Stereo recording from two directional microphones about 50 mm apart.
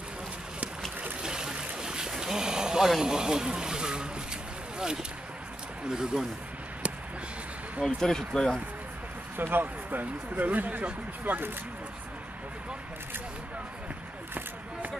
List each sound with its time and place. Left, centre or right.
1.2 s boat: centre
3.0 s speech: centre
5.9 s speech: centre
7.8 s speech: centre
9.4 s speech: right